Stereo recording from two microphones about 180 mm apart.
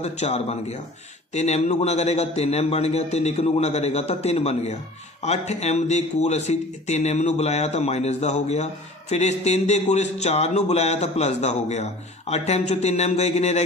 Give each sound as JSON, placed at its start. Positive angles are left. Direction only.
{"t": 0.0, "sound": "speech", "side_deg": 35}